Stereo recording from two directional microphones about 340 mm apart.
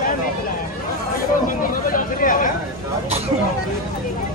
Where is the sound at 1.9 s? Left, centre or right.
Left.